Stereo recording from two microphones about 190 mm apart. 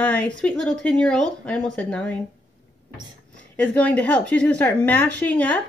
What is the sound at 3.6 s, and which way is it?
Speech, 10° left (ahead or behind).